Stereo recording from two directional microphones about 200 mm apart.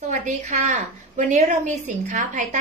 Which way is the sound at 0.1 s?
40° right (ahead or behind).